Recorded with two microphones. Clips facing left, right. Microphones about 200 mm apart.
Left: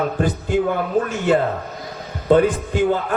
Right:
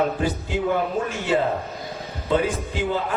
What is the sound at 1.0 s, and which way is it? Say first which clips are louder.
A man's voice: left 4 dB; 50° left (ahead or behind).